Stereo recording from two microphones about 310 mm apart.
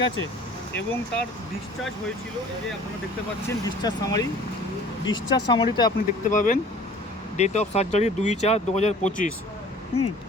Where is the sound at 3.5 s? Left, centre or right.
Centre.